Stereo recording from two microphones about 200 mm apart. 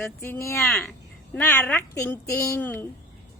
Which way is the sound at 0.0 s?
15° left (ahead or behind).